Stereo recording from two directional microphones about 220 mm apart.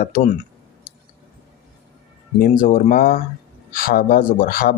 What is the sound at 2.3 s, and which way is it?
Speech, 40° left (ahead or behind).